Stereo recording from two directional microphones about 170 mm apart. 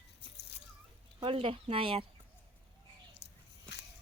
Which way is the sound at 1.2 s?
30° right (ahead or behind).